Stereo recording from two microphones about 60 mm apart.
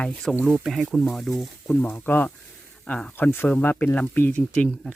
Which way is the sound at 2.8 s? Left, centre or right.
Left.